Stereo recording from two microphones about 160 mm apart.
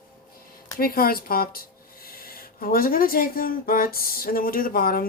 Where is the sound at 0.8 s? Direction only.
70° left (ahead or behind).